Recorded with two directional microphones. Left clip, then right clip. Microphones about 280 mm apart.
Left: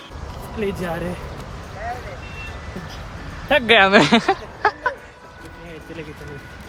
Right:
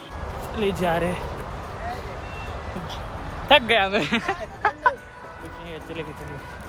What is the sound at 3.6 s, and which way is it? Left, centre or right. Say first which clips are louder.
Speech: left 8 dB; left.